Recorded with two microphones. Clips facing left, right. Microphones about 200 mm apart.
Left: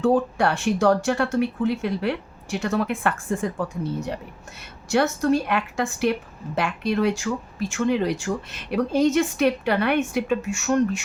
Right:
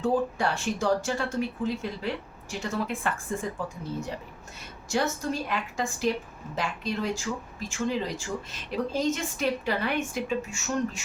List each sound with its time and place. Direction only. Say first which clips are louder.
0.0 s speech: left 6 dB; 70° left (ahead or behind)